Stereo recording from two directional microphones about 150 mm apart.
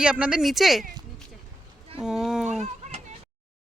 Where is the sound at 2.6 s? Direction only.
50° right (ahead or behind).